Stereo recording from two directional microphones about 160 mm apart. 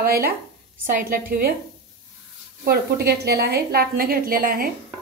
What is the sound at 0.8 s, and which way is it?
Speech, 60° right (ahead or behind).